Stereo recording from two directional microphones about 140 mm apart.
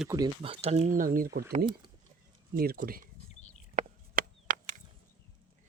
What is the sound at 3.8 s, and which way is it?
Chop, 75° right (ahead or behind).